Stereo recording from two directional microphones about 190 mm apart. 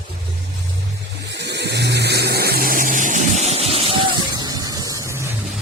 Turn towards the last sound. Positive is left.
turn(degrees=-15)  # may be behind; listen again after turning